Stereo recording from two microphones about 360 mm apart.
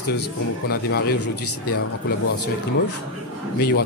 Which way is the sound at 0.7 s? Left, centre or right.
Left.